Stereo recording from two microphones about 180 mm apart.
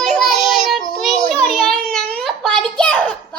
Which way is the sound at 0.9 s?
5° left (ahead or behind).